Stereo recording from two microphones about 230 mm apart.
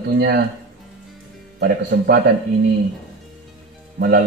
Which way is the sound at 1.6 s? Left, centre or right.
Right.